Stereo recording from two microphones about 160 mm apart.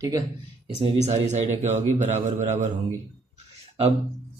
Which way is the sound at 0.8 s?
40° right (ahead or behind).